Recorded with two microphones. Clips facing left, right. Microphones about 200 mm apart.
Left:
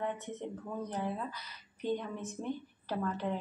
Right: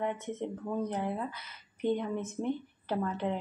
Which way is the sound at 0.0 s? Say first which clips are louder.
Right 3 dB; 20° right (ahead or behind).